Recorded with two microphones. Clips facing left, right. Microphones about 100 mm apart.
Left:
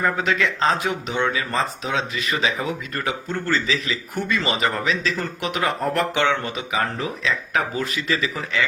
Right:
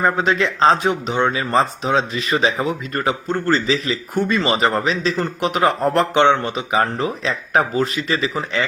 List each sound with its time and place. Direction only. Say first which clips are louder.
0.0 s a man's voice: right 4 dB; 30° right (ahead or behind)